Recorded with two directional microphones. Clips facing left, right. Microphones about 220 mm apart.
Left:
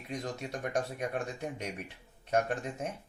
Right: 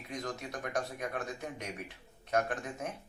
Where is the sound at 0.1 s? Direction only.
25° left (ahead or behind).